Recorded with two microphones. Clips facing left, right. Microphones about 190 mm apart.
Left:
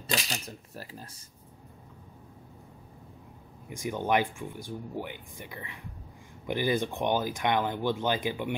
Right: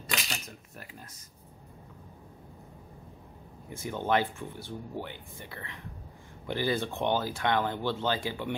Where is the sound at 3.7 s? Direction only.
15° left (ahead or behind).